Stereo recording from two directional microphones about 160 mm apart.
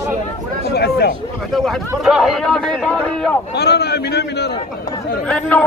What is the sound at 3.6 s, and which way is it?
Speech, 90° left.